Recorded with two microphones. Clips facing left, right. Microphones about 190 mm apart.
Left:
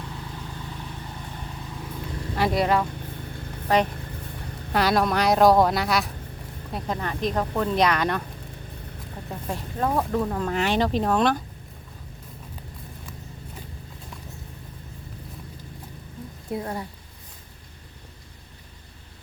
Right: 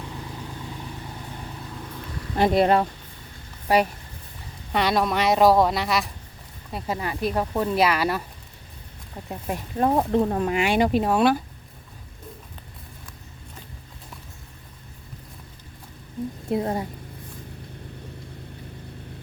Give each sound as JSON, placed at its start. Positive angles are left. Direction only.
{"t": 2.4, "sound": "speech", "side_deg": -30}
{"t": 3.7, "sound": "speech", "side_deg": -10}
{"t": 4.7, "sound": "a woman's voice", "side_deg": 0}
{"t": 9.8, "sound": "speech", "side_deg": -25}
{"t": 10.4, "sound": "speech", "side_deg": -10}
{"t": 16.5, "sound": "speech", "side_deg": -20}